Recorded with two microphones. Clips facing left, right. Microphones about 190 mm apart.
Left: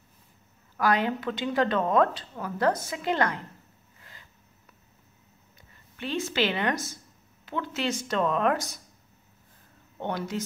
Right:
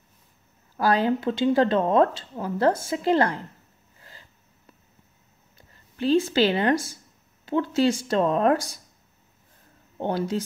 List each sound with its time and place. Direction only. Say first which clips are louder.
0.7 s speech: right 4 dB; 30° right (ahead or behind)
4.0 s a sound: right 3 dB; 30° right (ahead or behind)
5.6 s speech: right 9 dB; 30° right (ahead or behind)
9.9 s speech: right 5 dB; 30° right (ahead or behind)